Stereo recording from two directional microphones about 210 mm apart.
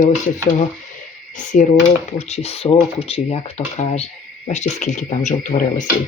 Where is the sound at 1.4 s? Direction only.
35° left (ahead or behind).